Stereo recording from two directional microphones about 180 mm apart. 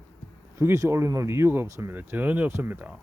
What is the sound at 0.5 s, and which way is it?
Speech, 15° right (ahead or behind).